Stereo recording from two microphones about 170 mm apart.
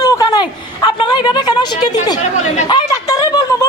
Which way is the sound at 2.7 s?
20° left (ahead or behind).